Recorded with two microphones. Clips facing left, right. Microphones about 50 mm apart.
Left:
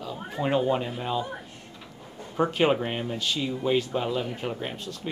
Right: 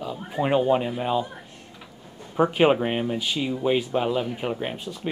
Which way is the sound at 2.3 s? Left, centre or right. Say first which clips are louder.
Right 4 dB; centre.